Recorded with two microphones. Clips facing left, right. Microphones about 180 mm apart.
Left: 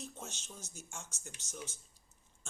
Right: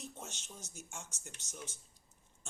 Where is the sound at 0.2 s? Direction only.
15° right (ahead or behind).